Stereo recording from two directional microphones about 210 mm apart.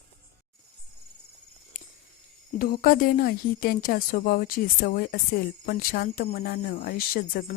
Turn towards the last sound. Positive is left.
turn(degrees=45)  # may be behind; listen again after turning